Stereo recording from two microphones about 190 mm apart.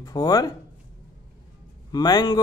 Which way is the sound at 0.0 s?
20° left (ahead or behind).